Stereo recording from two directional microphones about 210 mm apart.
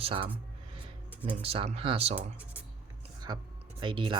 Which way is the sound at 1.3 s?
30° right (ahead or behind).